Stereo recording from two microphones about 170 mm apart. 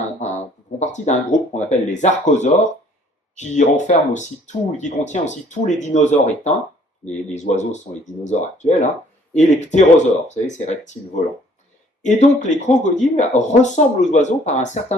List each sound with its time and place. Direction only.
0.2 s speech: 40° left (ahead or behind)